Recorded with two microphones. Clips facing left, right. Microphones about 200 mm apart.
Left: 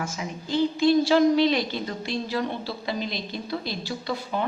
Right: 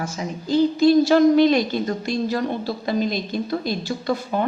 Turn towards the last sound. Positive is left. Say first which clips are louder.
# right 5 dB
turn(degrees=-45)  # may be behind; listen again after turning